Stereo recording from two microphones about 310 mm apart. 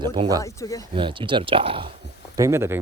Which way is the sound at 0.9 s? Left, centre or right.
Centre.